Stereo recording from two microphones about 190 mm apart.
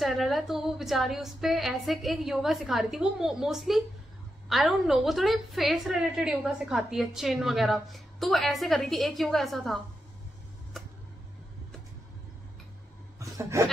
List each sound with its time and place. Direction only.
0.0 s a woman's voice: centre (ahead or behind)
13.2 s chuckle: 15° right (ahead or behind)